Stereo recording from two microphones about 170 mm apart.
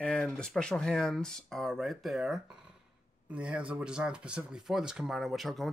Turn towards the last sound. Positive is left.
turn(degrees=0)  # may be behind; listen again after turning